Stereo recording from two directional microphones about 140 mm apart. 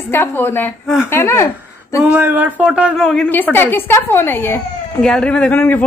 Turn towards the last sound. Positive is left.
turn(degrees=10)  # may be behind; listen again after turning